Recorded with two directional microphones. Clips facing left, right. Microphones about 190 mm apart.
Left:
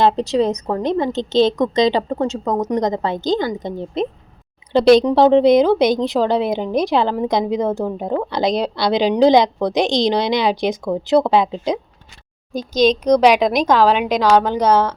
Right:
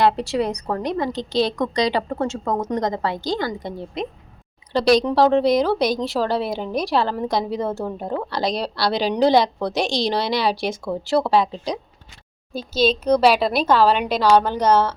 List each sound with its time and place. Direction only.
0.0 s a woman's voice: 20° left (ahead or behind)
13.1 s a woman's voice: 15° left (ahead or behind)